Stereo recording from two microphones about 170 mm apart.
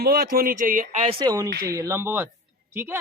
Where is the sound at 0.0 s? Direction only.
65° right (ahead or behind).